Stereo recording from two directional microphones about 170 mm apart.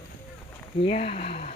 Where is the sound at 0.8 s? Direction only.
35° left (ahead or behind).